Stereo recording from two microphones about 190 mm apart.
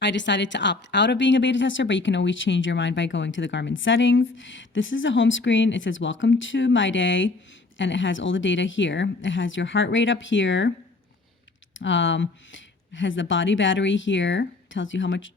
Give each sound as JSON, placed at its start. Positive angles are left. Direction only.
{"t": 0.0, "sound": "speech", "side_deg": 70}
{"t": 11.8, "sound": "speech", "side_deg": 75}